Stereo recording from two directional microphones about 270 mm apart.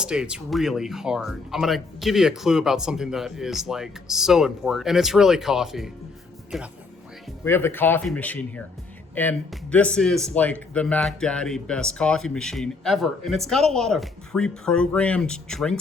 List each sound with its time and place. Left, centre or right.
0.0 s speech: centre